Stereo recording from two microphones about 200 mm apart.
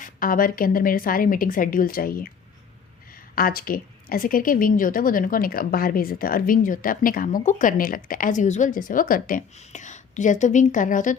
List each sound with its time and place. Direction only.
0.0 s a woman's voice: 45° left (ahead or behind)
3.3 s a woman's voice: 45° left (ahead or behind)